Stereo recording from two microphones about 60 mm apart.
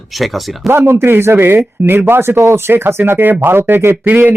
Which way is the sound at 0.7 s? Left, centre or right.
Right.